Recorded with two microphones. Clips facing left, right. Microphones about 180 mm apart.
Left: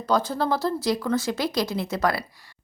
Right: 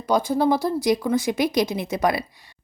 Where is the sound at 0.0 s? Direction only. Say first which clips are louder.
Right 4 dB; 15° right (ahead or behind).